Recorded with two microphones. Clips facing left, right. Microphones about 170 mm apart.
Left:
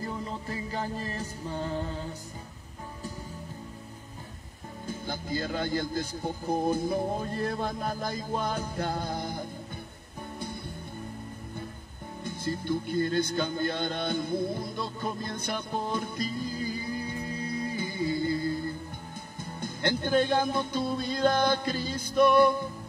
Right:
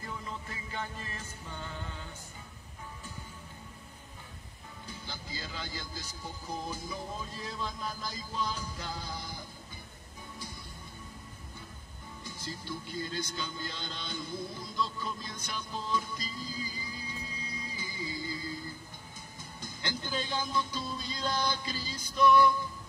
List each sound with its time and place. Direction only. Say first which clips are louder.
0.0 s music: left 7 dB; 35° left (ahead or behind)
4.8 s speech: left 10 dB; 50° left (ahead or behind)
12.2 s speech: left 10 dB; 55° left (ahead or behind)